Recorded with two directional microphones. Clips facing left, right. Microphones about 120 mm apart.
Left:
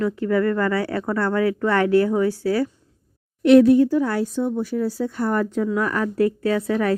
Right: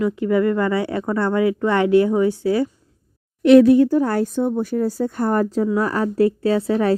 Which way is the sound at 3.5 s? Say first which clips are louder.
Right 2 dB; 90° right.